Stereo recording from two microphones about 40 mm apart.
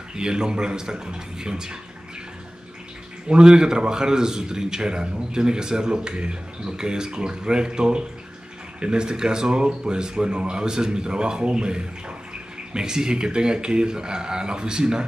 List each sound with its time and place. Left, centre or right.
0.1 s a man's voice: centre
3.3 s a man's voice: right